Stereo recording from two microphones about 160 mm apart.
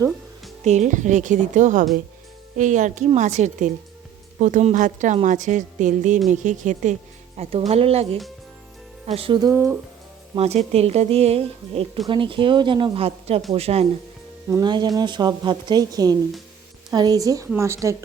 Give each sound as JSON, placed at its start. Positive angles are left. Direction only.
{"t": 0.6, "sound": "a woman's voice", "side_deg": -45}
{"t": 7.4, "sound": "speech", "side_deg": -40}
{"t": 9.4, "sound": "speech", "side_deg": -15}
{"t": 10.3, "sound": "speech", "side_deg": -40}
{"t": 14.5, "sound": "a woman's voice", "side_deg": -25}